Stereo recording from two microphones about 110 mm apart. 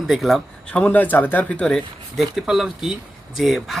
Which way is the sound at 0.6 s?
10° left (ahead or behind).